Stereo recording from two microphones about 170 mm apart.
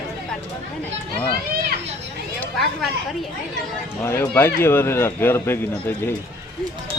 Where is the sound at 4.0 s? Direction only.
15° left (ahead or behind).